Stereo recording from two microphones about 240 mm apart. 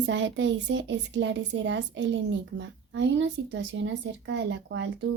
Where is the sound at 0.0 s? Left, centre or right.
Right.